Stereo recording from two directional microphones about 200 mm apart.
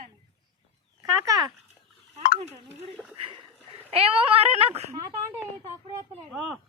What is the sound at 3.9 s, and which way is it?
Speech, 30° right (ahead or behind).